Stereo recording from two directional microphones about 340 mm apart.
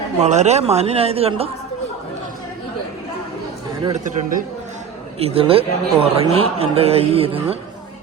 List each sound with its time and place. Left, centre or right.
0.2 s a man's voice: centre
3.8 s a man's voice: right